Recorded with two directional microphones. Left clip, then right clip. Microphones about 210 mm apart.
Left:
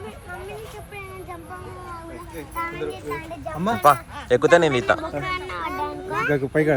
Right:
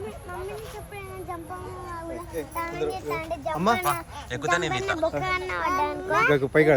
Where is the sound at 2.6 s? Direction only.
45° right (ahead or behind).